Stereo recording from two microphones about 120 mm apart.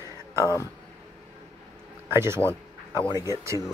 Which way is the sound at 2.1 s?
20° right (ahead or behind).